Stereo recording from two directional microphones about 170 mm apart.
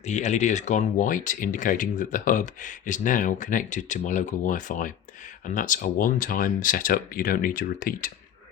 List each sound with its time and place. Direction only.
0.0 s speech: 45° left (ahead or behind)